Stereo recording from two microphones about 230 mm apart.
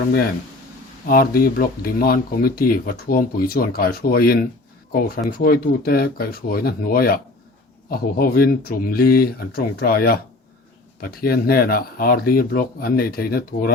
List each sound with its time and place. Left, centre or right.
1.0 s speech: left